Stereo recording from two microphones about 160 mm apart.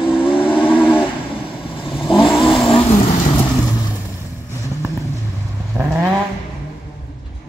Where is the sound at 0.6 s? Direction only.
10° left (ahead or behind).